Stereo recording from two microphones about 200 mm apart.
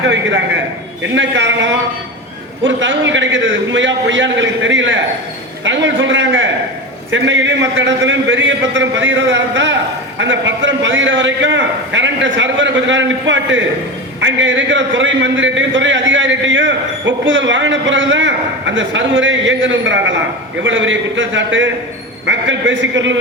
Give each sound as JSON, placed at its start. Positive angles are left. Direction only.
{"t": 0.0, "sound": "a man's voice", "side_deg": -65}